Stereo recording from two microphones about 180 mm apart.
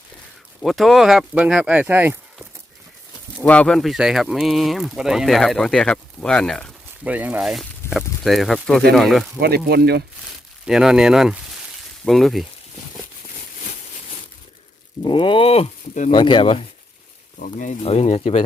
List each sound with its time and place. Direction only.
0.6 s speech: centre (ahead or behind)
3.4 s speech: 5° left (ahead or behind)
7.0 s speech: 10° right (ahead or behind)
9.6 s speech: 65° right (ahead or behind)
10.7 s speech: 5° right (ahead or behind)
15.0 s speech: 25° left (ahead or behind)
16.1 s speech: 25° left (ahead or behind)
17.4 s speech: 45° left (ahead or behind)